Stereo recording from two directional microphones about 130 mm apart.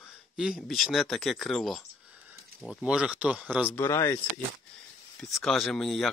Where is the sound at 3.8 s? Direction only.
25° left (ahead or behind).